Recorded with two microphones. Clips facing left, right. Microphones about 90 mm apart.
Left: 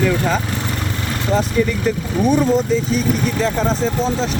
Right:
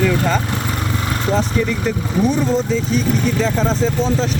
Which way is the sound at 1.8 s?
5° left (ahead or behind).